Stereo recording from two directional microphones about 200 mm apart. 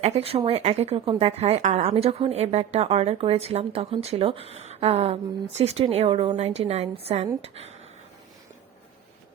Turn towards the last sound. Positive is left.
turn(degrees=-30)  # may be behind; listen again after turning